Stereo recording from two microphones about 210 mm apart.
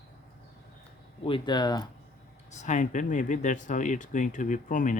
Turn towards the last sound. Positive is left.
turn(degrees=40)  # may be behind; listen again after turning